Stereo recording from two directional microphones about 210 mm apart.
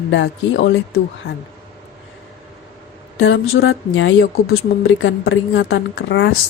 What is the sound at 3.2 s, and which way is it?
A woman's voice, 55° left (ahead or behind).